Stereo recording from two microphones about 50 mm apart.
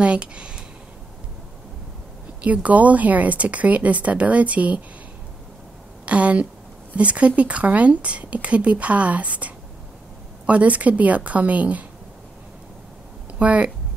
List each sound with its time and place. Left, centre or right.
0.0 s a sound: right
2.4 s speech: right
6.0 s speech: right
13.4 s speech: right